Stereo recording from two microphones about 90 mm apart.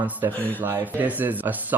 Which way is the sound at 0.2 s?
30° right (ahead or behind).